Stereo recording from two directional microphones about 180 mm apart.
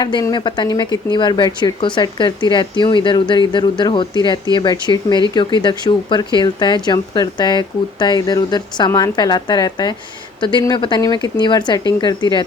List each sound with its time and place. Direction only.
0.0 s speech: 20° left (ahead or behind)